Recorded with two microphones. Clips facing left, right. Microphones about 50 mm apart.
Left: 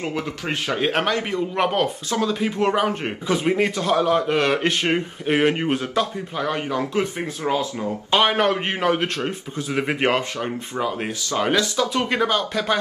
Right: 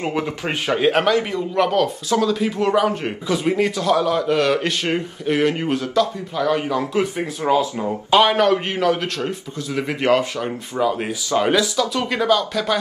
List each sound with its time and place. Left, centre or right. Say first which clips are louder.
0.0 s a man's voice: right 4 dB; right
0.7 s a man's voice: right 5 dB; centre
1.0 s a man's voice: right 3 dB; centre
1.6 s a man's voice: right 4 dB; left
6.8 s speech: right 2 dB; centre
7.5 s a man's voice: right 6 dB; right
8.1 s a man's voice: right 4 dB; centre
10.3 s a man's voice: right 2 dB; centre
11.4 s speech: right 1 dB; centre
11.8 s a man's voice: even; centre